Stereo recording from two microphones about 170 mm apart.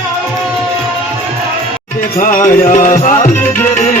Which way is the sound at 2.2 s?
50° left (ahead or behind).